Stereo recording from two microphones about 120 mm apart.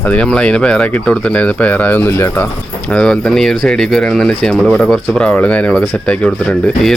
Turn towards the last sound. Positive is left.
turn(degrees=10)  # may be behind; listen again after turning